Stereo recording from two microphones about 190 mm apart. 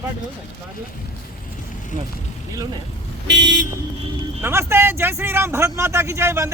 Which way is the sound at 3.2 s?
70° right (ahead or behind).